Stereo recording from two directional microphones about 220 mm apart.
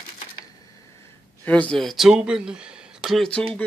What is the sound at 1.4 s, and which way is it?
Speech, 5° left (ahead or behind).